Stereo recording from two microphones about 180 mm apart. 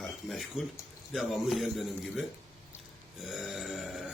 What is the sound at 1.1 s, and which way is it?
A man's voice, centre (ahead or behind).